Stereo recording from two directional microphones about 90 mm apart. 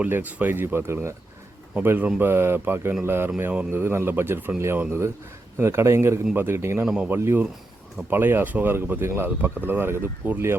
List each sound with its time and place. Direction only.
0.0 s speech: 20° right (ahead or behind)
6.8 s speech: 5° right (ahead or behind)
7.1 s speech: 25° right (ahead or behind)